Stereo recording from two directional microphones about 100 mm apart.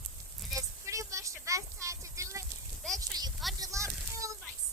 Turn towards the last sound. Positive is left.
turn(degrees=-30)  # may be behind; listen again after turning